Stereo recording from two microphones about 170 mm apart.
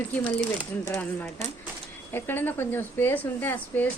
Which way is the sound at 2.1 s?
10° left (ahead or behind).